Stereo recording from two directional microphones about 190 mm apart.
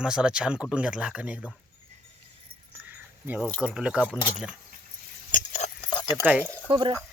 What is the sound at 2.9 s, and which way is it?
Keys jangling, 5° right (ahead or behind).